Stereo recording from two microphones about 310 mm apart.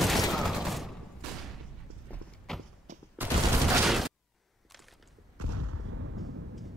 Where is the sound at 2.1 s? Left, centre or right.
Centre.